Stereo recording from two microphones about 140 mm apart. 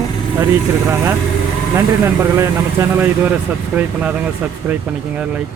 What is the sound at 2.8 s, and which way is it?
Speech, 20° right (ahead or behind).